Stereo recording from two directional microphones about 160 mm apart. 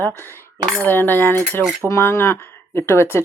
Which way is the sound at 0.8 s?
10° left (ahead or behind).